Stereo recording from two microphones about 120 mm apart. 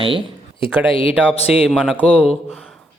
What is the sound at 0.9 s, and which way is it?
Speech, 45° left (ahead or behind).